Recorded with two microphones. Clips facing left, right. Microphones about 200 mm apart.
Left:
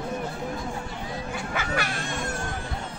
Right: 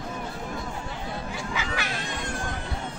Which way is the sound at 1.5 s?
55° left (ahead or behind).